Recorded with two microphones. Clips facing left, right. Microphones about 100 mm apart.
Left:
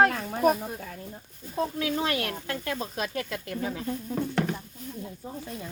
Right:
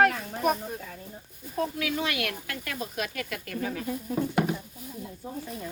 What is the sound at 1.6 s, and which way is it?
Speech, 30° left (ahead or behind).